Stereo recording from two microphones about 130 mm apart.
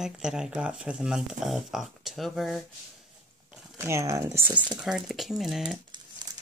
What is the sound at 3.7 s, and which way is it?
Speech, 20° right (ahead or behind).